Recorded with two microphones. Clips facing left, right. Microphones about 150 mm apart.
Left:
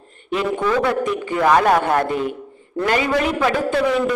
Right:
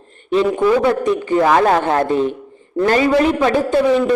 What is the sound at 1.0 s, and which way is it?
A man's voice, 35° right (ahead or behind).